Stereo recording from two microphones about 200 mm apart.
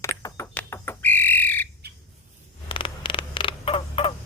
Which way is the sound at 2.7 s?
25° left (ahead or behind).